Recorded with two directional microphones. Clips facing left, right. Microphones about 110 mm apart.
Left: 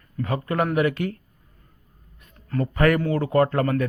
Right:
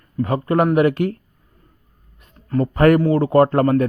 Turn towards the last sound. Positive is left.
turn(degrees=-35)  # may be behind; listen again after turning